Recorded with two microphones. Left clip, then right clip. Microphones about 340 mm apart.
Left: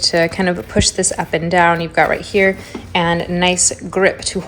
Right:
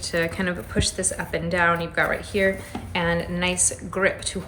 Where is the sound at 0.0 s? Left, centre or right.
Centre.